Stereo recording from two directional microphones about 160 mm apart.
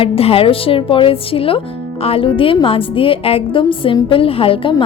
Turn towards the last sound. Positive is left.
turn(degrees=35)  # may be behind; listen again after turning